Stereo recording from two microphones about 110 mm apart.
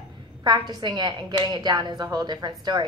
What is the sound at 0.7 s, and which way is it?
A woman's voice, 40° right (ahead or behind).